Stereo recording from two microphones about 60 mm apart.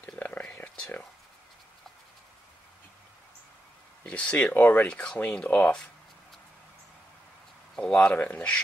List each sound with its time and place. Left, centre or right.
0.2 s a sound: left
4.0 s speech: left
4.8 s speech: centre
8.0 s speech: left